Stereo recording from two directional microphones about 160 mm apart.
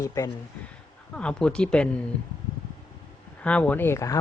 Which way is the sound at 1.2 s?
5° left (ahead or behind).